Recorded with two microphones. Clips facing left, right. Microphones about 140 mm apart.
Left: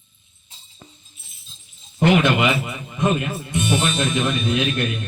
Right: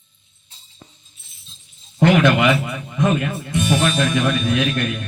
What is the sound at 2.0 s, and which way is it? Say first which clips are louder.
Speech: right 2 dB; 20° left (ahead or behind).